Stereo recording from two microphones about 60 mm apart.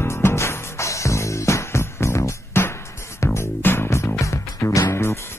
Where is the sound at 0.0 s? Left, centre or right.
Left.